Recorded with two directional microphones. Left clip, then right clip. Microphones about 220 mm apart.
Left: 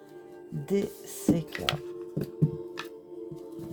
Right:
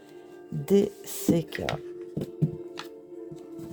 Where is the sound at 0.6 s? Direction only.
45° right (ahead or behind).